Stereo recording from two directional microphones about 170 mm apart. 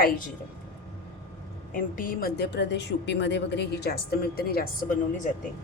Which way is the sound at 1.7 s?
55° left (ahead or behind).